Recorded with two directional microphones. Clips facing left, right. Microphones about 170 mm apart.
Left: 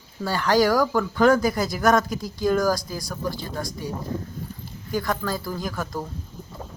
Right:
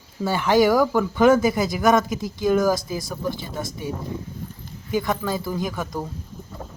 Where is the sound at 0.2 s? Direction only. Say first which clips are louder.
Right 2 dB; 20° right (ahead or behind).